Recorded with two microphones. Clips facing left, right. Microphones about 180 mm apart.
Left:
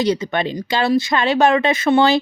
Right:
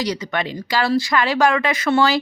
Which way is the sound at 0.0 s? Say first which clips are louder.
Left 5 dB; 25° left (ahead or behind).